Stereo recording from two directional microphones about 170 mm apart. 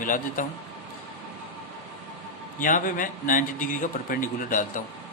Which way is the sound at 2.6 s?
50° left (ahead or behind).